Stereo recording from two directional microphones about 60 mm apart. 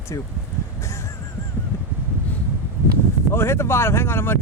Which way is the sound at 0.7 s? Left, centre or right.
Left.